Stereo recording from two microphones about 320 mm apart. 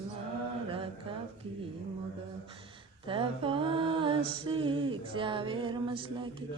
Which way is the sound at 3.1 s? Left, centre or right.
Centre.